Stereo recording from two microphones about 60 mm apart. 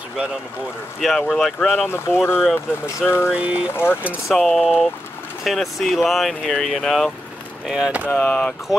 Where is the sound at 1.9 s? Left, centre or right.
Left.